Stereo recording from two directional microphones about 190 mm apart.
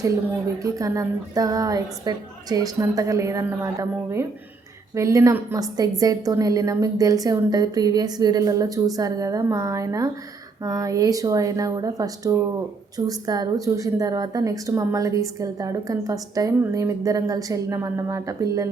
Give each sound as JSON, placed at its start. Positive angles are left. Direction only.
{"t": 0.6, "sound": "a woman's voice", "side_deg": -15}